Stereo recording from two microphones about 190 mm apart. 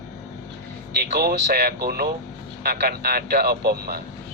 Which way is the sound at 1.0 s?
55° right (ahead or behind).